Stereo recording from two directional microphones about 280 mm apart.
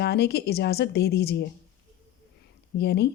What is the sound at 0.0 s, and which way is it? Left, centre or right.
Speech, left.